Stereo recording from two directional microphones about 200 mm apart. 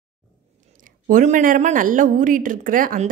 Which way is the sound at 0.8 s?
40° right (ahead or behind).